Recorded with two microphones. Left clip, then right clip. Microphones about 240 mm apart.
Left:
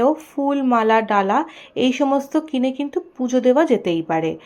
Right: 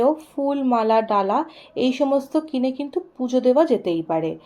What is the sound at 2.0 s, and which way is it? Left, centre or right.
Speech, left.